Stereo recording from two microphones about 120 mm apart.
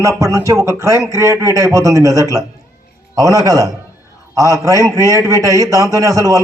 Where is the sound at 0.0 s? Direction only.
25° right (ahead or behind).